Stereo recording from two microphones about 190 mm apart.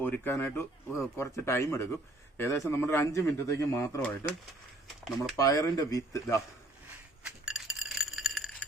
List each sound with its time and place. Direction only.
0.0 s speech: 10° left (ahead or behind)
5.4 s speech: 20° left (ahead or behind)
7.3 s a sound: 5° right (ahead or behind)